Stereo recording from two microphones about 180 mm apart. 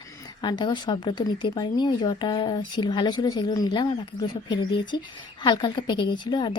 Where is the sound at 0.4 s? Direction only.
25° left (ahead or behind).